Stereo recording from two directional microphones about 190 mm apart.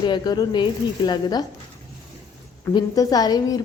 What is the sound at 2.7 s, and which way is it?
Speech, 20° left (ahead or behind).